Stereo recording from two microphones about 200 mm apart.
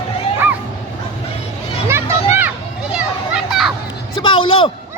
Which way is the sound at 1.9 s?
10° right (ahead or behind).